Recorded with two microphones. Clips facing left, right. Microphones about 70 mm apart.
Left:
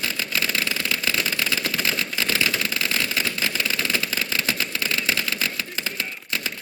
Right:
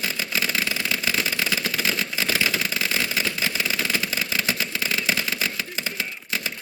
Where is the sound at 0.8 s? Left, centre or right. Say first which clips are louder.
Even; centre.